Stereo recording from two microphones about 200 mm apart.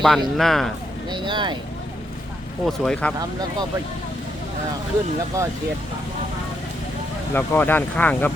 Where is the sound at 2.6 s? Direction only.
5° left (ahead or behind).